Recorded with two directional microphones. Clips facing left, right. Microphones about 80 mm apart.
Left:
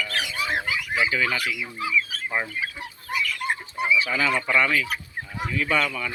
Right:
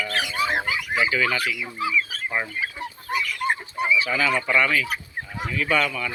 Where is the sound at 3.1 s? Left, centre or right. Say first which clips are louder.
Right 2 dB; right.